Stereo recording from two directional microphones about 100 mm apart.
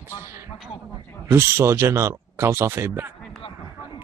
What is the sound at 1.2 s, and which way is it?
Speech, 25° right (ahead or behind).